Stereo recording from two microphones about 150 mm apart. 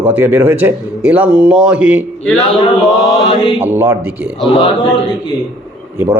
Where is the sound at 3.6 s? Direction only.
15° right (ahead or behind).